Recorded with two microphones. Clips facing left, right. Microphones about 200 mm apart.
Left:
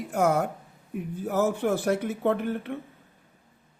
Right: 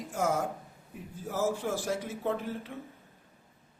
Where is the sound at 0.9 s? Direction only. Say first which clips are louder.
Left 9 dB; 60° left (ahead or behind).